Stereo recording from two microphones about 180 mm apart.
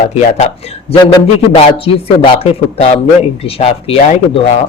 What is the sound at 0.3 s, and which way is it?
Speech, 35° left (ahead or behind).